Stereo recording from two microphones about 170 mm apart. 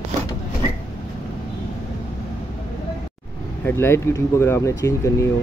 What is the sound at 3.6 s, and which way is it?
Speech, 15° left (ahead or behind).